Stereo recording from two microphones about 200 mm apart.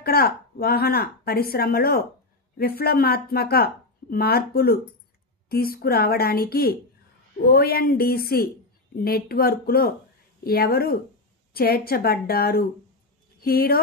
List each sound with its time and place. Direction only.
0.0 s speech: 50° left (ahead or behind)